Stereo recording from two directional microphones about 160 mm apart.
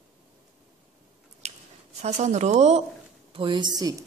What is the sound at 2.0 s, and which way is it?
Speech, 45° right (ahead or behind).